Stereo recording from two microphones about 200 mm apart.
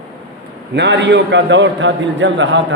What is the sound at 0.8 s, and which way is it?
A man's voice, 60° right (ahead or behind).